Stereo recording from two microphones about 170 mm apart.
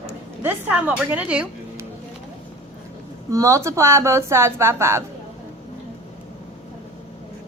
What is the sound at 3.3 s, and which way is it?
A woman's voice, 20° right (ahead or behind).